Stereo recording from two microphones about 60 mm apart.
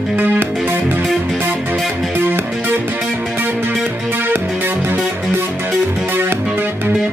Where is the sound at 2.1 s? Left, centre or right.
Right.